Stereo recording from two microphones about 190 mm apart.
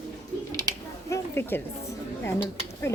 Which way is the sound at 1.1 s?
10° left (ahead or behind).